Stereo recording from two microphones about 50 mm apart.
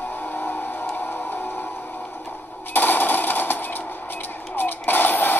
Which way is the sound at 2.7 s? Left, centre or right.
Left.